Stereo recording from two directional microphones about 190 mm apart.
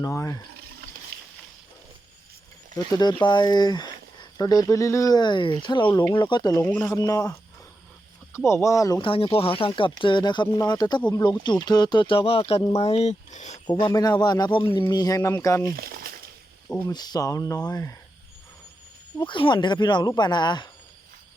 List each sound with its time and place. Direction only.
0.0 s speech: 15° left (ahead or behind)
2.7 s speech: 20° left (ahead or behind)
8.4 s speech: 15° left (ahead or behind); by 13.6 s 35° left (ahead or behind)
13.7 s speech: 25° left (ahead or behind)
15.7 s speech: 50° right (ahead or behind)
16.9 s speech: 20° left (ahead or behind)
19.2 s speech: 25° left (ahead or behind)